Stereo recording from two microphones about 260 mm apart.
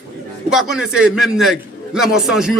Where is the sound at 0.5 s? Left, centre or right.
Centre.